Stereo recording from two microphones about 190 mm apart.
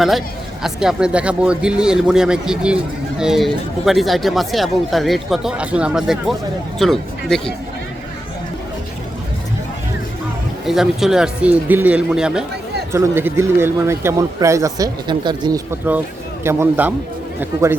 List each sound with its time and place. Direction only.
0.6 s speech: 5° right (ahead or behind)
10.7 s a man's voice: centre (ahead or behind)